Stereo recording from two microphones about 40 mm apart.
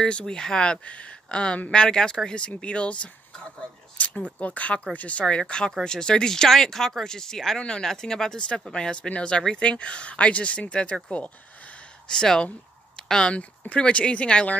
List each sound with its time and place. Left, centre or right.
0.2 s speech: centre; by 5.2 s left
5.2 s speech: left
12.2 s speech: left
12.9 s a sound: centre
13.3 s speech: left